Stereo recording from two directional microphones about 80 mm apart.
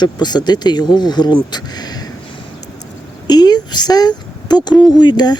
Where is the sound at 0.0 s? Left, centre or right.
Left.